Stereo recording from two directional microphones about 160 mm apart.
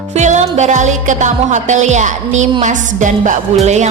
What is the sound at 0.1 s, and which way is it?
Speech, 45° right (ahead or behind).